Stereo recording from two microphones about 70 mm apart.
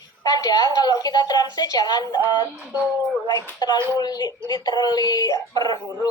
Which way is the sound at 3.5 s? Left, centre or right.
Left.